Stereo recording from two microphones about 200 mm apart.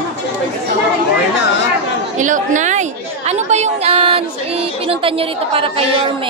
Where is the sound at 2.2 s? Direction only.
40° right (ahead or behind).